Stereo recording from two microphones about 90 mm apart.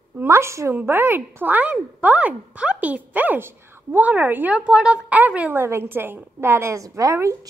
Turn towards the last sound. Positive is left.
turn(degrees=-35)  # may be behind; listen again after turning